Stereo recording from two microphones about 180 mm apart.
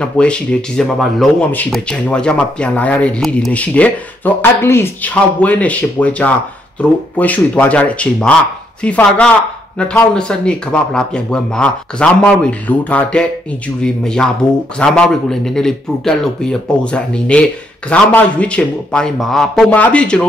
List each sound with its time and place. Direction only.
0.0 s speech: 5° left (ahead or behind)